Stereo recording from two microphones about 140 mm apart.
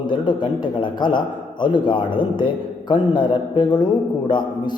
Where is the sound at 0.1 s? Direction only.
35° left (ahead or behind).